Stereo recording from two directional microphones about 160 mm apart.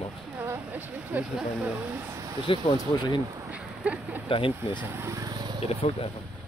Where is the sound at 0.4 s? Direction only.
10° right (ahead or behind).